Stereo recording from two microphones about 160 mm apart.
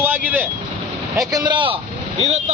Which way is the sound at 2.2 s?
45° right (ahead or behind).